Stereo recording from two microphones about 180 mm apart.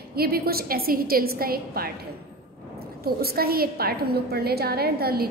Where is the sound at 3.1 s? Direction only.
55° right (ahead or behind).